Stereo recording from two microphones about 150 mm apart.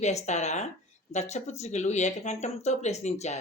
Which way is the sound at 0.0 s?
45° left (ahead or behind).